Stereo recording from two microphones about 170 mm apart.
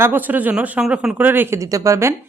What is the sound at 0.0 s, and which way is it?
Speech, 10° right (ahead or behind).